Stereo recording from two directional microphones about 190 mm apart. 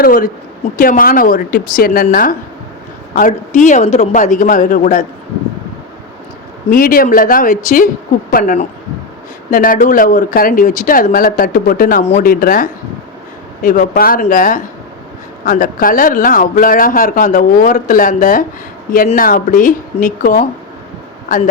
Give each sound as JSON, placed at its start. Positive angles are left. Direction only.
{"t": 0.0, "sound": "a man's voice", "side_deg": 45}
{"t": 6.7, "sound": "a man's voice", "side_deg": 45}